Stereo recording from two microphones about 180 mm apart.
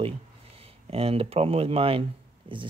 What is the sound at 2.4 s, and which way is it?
Pig, 30° right (ahead or behind).